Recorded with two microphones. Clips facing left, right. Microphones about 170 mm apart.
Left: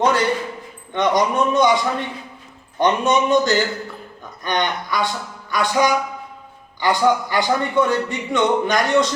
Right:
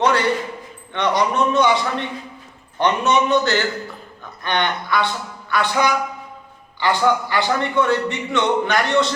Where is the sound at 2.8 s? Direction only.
15° left (ahead or behind).